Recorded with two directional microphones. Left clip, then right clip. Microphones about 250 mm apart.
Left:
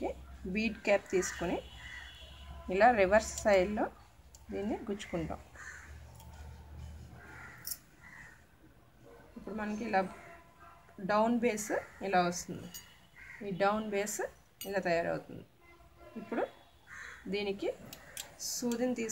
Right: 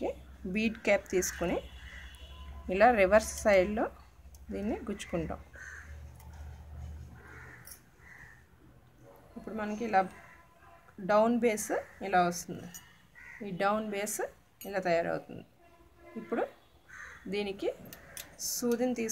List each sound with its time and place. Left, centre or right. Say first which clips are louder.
0.0 s speech: right 3 dB; centre
2.7 s speech: right 2 dB; centre
9.6 s speech: right 4 dB; centre
11.1 s speech: right 4 dB; centre
17.3 s speech: right 1 dB; centre